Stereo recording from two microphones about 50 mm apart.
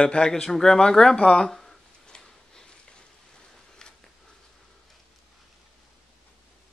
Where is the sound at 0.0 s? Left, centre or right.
Centre.